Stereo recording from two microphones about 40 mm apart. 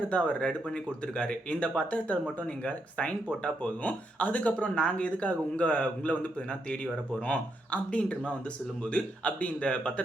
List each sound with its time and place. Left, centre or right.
0.1 s speech: left